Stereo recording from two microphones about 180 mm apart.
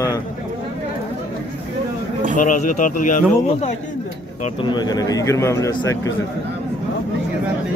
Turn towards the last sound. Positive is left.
turn(degrees=15)  # may be behind; listen again after turning